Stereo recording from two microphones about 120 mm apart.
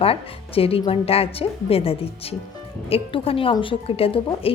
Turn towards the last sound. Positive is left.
turn(degrees=50)  # may be behind; listen again after turning